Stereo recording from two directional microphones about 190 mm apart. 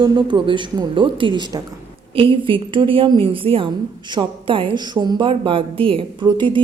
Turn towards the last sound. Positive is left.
turn(degrees=-25)  # may be behind; listen again after turning